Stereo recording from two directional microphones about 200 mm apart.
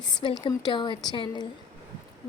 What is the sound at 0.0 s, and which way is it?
A woman's voice, 20° left (ahead or behind).